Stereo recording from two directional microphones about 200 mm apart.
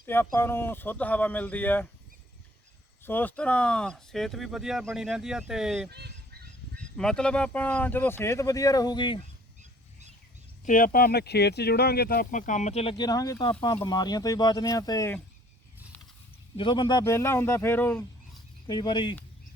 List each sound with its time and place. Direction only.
0.0 s speech: 10° left (ahead or behind)
3.0 s speech: 10° left (ahead or behind)
5.9 s speech: 55° right (ahead or behind)
6.7 s speech: 5° left (ahead or behind); by 9.1 s 20° left (ahead or behind)
10.7 s speech: 45° left (ahead or behind); by 15.2 s 15° left (ahead or behind)
16.6 s speech: 25° left (ahead or behind)
18.7 s speech: 20° left (ahead or behind)